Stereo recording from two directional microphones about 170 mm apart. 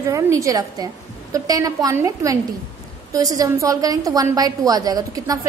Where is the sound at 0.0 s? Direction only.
20° right (ahead or behind).